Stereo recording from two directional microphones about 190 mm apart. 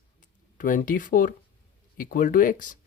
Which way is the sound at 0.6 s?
45° left (ahead or behind).